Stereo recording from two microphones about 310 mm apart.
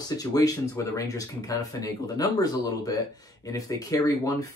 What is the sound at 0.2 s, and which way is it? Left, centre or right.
Speech, centre.